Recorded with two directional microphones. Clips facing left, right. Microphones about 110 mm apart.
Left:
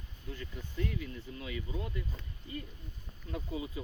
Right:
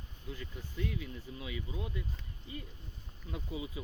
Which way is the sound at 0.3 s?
10° right (ahead or behind).